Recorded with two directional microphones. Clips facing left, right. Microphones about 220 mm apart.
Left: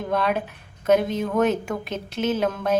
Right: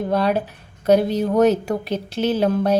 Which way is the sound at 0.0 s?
35° right (ahead or behind).